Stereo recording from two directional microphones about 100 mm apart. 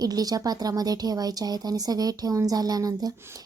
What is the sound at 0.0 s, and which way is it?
A woman's voice, 40° right (ahead or behind).